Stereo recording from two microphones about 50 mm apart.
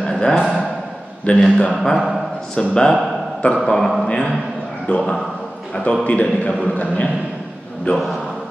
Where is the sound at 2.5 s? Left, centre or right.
Centre.